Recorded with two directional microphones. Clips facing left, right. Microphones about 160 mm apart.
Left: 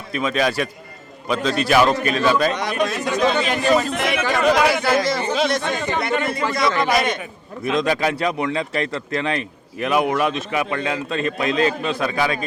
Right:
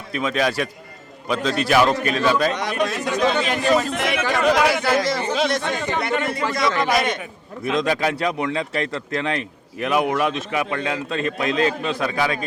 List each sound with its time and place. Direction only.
0.1 s a man's voice: 10° left (ahead or behind)